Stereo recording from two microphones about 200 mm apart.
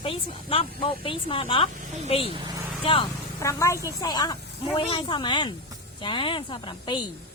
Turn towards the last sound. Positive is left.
turn(degrees=25)  # may be behind; listen again after turning